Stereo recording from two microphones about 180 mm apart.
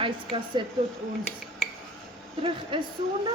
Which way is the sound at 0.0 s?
30° right (ahead or behind).